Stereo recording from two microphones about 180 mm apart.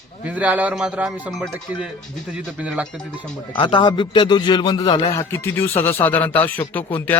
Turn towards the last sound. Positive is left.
turn(degrees=10)  # may be behind; listen again after turning